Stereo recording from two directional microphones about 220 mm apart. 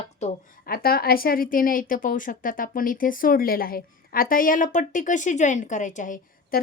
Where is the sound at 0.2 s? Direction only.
30° left (ahead or behind).